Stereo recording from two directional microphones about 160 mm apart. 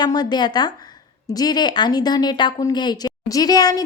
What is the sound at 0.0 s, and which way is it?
A woman's voice, 25° left (ahead or behind).